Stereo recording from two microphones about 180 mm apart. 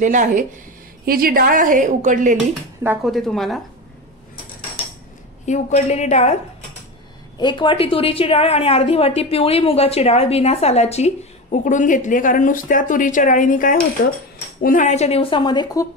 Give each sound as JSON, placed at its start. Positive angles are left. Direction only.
{"t": 0.0, "sound": "a woman's voice", "side_deg": -45}
{"t": 3.0, "sound": "a woman's voice", "side_deg": 0}
{"t": 5.4, "sound": "a woman's voice", "side_deg": 40}
{"t": 7.3, "sound": "a woman's voice", "side_deg": 25}